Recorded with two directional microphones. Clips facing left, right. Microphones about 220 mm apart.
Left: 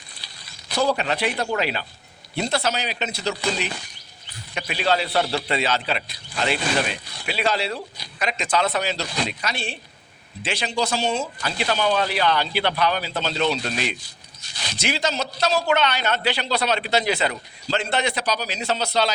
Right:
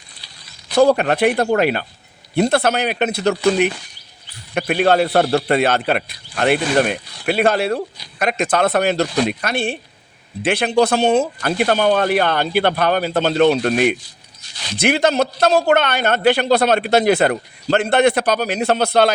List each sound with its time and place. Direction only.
0.8 s a man's voice: 55° right (ahead or behind)